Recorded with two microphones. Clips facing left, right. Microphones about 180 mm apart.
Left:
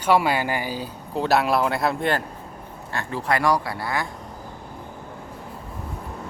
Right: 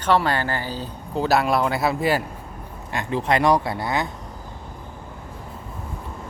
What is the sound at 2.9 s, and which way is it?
Speech, 20° right (ahead or behind).